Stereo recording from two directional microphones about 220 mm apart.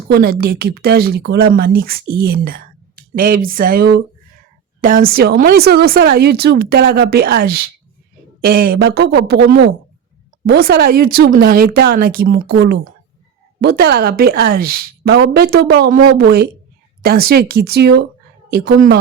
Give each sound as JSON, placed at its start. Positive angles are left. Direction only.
{"t": 0.1, "sound": "speech", "side_deg": -45}